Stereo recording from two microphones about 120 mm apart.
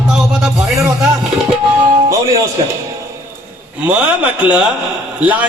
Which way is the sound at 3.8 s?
10° right (ahead or behind).